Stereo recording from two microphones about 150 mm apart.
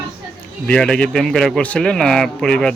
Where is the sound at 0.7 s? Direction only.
5° left (ahead or behind).